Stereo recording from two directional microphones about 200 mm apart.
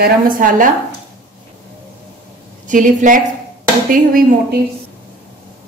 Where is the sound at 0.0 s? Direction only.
45° right (ahead or behind).